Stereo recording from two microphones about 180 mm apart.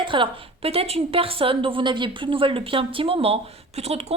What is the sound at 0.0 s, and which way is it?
A woman's voice, 30° right (ahead or behind).